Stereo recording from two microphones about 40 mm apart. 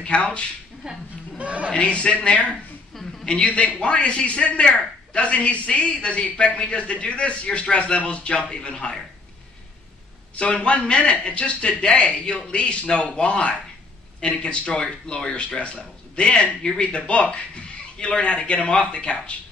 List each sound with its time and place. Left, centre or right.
0.0 s a man's voice: left
0.8 s speech: centre
1.4 s speech: right
1.7 s a man's voice: left
2.9 s a sound: centre
3.3 s a woman's voice: left
10.3 s a woman's voice: left